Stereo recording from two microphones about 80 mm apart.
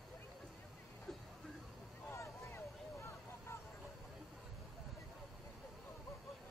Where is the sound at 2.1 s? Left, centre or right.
Left.